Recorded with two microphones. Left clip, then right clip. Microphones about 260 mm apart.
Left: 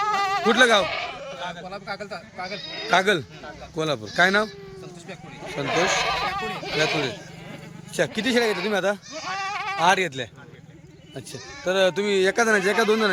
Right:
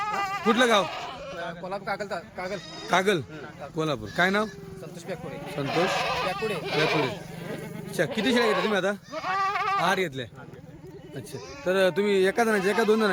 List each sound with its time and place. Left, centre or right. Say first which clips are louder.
0.0 s a sound: left 6 dB; left
0.4 s speech: left 3 dB; centre
1.7 s speech: right 2 dB; centre
3.0 s a man's voice: left 3 dB; centre
5.5 s speech: left 4 dB; centre
6.7 s a man's voice: left 1 dB; centre
9.4 s bleat: right 3 dB; centre
9.8 s a man's voice: left 6 dB; centre
11.6 s a man's voice: left 2 dB; centre